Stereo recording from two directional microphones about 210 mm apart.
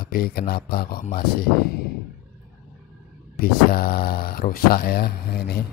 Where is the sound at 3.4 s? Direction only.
45° left (ahead or behind).